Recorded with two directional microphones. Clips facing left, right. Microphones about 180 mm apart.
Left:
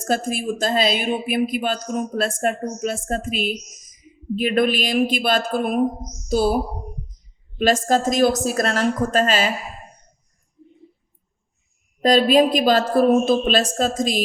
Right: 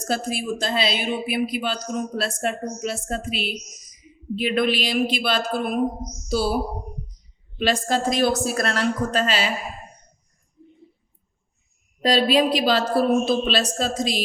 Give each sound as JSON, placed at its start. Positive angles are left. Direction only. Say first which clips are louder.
{"t": 0.1, "sound": "speech", "louder": "left 3 dB", "side_deg": 45}
{"t": 7.6, "sound": "speech", "louder": "left 4 dB", "side_deg": 45}
{"t": 12.0, "sound": "speech", "louder": "left 4 dB", "side_deg": 45}